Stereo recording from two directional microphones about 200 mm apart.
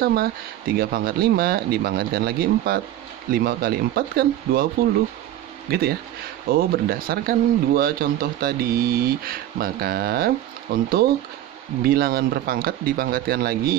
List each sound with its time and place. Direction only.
0.0 s speech: 50° right (ahead or behind)
5.7 s speech: 50° right (ahead or behind)